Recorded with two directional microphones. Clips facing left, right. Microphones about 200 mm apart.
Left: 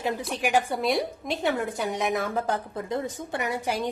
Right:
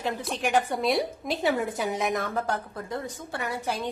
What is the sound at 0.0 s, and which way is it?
A woman's voice, 10° left (ahead or behind).